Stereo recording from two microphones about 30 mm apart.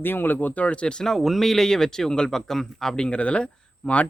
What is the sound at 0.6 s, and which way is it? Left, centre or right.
Speech, left.